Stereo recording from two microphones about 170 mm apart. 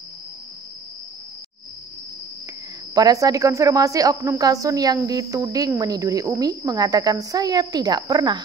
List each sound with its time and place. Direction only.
2.9 s speech: 20° right (ahead or behind)